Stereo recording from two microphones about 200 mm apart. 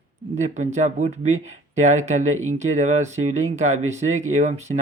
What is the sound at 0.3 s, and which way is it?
Speech, 35° right (ahead or behind).